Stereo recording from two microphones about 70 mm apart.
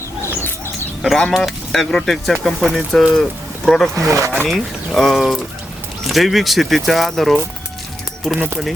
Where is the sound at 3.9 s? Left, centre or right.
Right.